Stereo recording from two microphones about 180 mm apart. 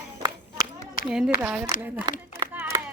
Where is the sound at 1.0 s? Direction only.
50° left (ahead or behind).